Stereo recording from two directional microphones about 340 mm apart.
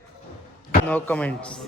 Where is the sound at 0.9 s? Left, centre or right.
Centre.